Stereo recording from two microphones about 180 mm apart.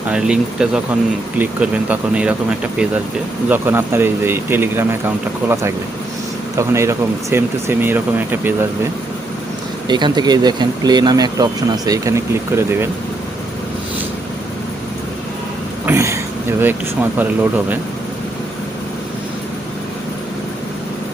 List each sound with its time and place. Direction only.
0.1 s speech: 5° right (ahead or behind)
9.9 s speech: 25° right (ahead or behind)
15.9 s speech: 15° right (ahead or behind)